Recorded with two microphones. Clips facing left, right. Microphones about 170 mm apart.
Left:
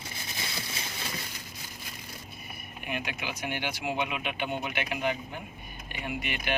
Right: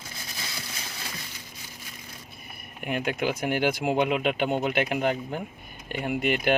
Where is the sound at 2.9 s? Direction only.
45° right (ahead or behind).